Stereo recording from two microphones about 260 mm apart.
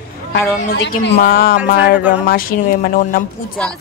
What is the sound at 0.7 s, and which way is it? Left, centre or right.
Speech, left.